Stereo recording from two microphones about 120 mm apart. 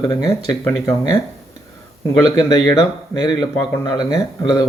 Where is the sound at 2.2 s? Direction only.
35° left (ahead or behind).